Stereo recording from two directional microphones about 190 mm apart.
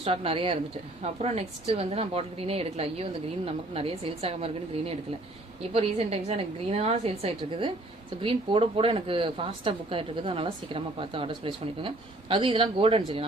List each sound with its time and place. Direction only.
0.0 s a woman's voice: 30° right (ahead or behind)